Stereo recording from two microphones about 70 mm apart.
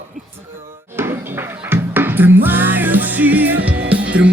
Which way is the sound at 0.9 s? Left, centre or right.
Right.